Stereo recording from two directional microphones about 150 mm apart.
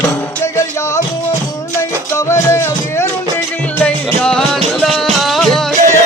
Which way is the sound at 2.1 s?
20° left (ahead or behind).